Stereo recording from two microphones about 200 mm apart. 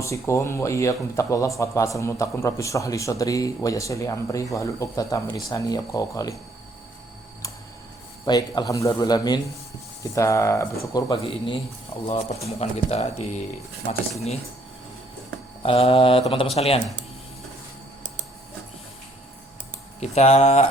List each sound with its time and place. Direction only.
0.0 s speech: 15° left (ahead or behind)
8.2 s speech: 20° left (ahead or behind)
15.6 s speech: 30° left (ahead or behind)
20.0 s speech: 30° left (ahead or behind)